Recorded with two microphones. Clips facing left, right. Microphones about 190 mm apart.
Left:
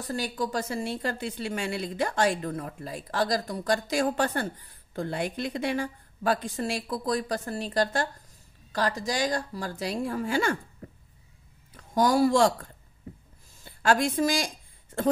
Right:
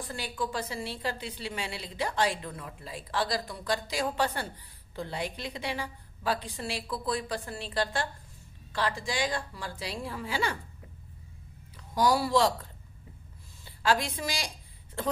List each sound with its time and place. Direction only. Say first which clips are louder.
0.0 s a woman's voice: left 4 dB; 40° left (ahead or behind)
11.7 s a woman's voice: left 3 dB; 50° left (ahead or behind)
13.7 s a woman's voice: left 4 dB; 50° left (ahead or behind)